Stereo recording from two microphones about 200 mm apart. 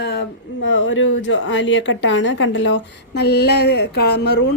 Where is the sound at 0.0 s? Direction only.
55° left (ahead or behind).